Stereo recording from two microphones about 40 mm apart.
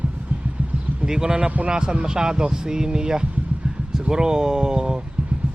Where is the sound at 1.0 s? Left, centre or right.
Centre.